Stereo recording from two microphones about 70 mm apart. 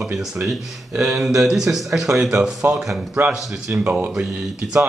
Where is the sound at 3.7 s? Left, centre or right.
Right.